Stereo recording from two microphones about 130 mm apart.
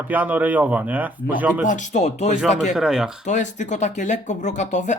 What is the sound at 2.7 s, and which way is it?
Speech, 5° right (ahead or behind).